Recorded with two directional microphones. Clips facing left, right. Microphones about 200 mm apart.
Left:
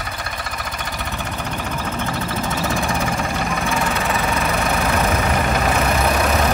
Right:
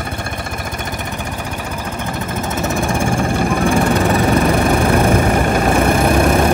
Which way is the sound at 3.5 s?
50° right (ahead or behind).